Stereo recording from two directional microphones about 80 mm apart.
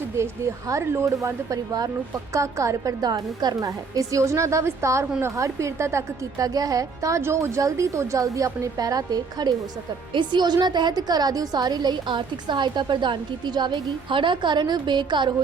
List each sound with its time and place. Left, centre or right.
0.2 s a woman's voice: right
3.0 s a woman's voice: right
3.7 s a woman's voice: right
10.1 s a woman's voice: right